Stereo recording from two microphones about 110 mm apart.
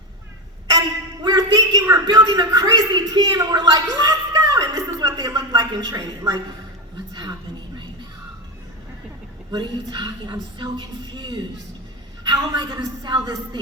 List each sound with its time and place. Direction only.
1.2 s a man's voice: 35° right (ahead or behind)
9.5 s a woman's voice: 45° right (ahead or behind)